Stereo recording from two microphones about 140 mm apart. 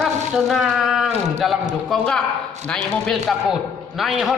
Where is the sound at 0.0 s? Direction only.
Centre (ahead or behind).